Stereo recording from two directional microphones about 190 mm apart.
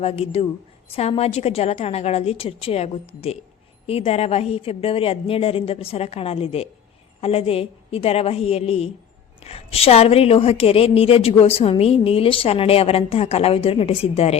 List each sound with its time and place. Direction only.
0.0 s a woman's voice: 30° left (ahead or behind)